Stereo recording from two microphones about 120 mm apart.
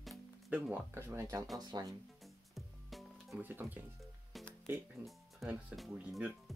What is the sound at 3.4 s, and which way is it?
Speech, 15° right (ahead or behind).